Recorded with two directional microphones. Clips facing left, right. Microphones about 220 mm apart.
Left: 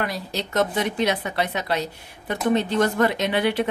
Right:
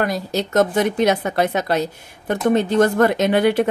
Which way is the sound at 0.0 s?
45° right (ahead or behind).